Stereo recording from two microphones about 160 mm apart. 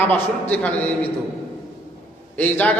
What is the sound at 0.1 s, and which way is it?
Speech, 10° left (ahead or behind).